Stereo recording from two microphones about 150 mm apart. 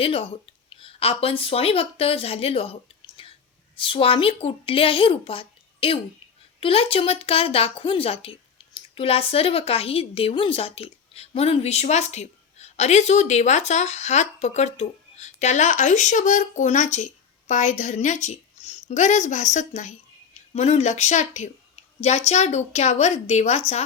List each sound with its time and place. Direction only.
0.0 s speech: 40° left (ahead or behind)
3.2 s whispering: 35° left (ahead or behind)
3.8 s a woman's voice: 35° left (ahead or behind)